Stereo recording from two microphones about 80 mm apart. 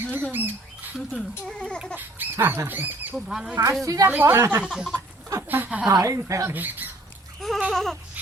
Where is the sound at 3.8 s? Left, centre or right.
Right.